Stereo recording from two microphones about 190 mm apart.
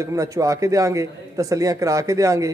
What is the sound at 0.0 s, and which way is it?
A man's voice, 15° right (ahead or behind).